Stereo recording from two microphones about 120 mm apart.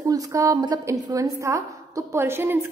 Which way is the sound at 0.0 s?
30° right (ahead or behind).